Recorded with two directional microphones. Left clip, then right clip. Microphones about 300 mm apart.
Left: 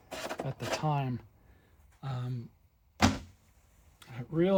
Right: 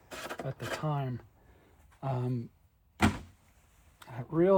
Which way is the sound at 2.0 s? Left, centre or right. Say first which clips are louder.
Right 7 dB; centre.